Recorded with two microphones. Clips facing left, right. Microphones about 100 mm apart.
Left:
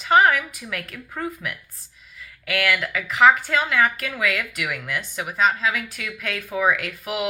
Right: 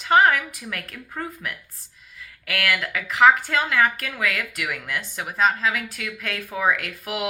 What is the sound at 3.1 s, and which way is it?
A woman's voice, 45° right (ahead or behind).